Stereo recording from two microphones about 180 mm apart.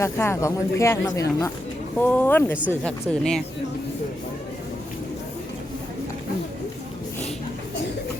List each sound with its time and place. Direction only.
0.0 s speech: 15° left (ahead or behind)